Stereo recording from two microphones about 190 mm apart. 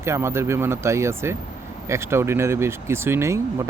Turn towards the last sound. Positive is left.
turn(degrees=-15)  # may be behind; listen again after turning